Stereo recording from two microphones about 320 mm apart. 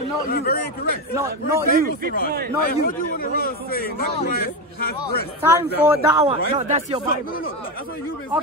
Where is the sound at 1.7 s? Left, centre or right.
Right.